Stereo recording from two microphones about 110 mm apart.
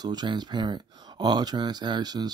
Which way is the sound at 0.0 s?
40° right (ahead or behind).